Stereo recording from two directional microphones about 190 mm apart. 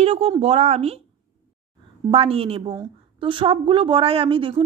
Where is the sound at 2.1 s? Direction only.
30° right (ahead or behind).